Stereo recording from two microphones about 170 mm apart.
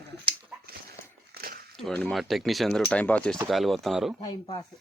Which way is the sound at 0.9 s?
65° right (ahead or behind).